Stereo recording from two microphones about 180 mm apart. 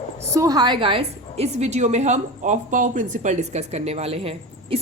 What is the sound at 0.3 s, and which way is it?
A woman's voice, 20° right (ahead or behind).